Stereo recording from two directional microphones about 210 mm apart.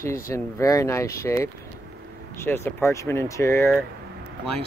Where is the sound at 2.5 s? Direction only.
10° left (ahead or behind).